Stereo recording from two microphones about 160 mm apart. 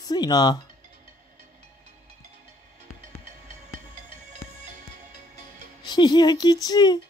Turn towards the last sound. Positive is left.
turn(degrees=25)  # may be behind; listen again after turning